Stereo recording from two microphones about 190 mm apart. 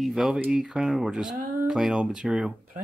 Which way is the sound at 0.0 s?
Centre (ahead or behind).